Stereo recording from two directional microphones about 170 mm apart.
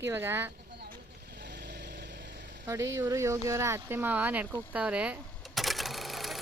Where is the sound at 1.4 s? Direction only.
90° right.